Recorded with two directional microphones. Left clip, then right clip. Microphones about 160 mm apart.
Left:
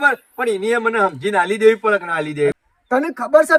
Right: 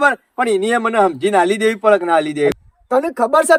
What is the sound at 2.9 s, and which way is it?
Speech, 50° right (ahead or behind).